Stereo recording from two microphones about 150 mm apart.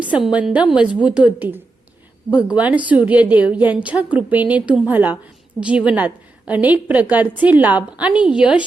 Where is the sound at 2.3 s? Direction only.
30° left (ahead or behind).